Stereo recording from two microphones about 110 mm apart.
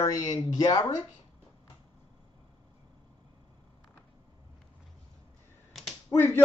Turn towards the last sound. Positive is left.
turn(degrees=20)  # may be behind; listen again after turning